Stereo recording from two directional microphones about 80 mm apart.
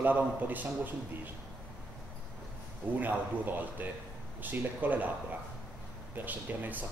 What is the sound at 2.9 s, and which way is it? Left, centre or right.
A man's voice, right.